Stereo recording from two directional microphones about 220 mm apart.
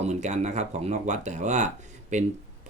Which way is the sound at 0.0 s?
30° right (ahead or behind).